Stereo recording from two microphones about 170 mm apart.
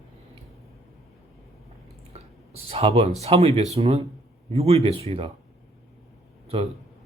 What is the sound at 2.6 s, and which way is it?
A man's voice, 35° right (ahead or behind).